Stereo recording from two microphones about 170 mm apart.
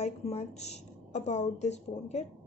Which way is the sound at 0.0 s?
40° left (ahead or behind).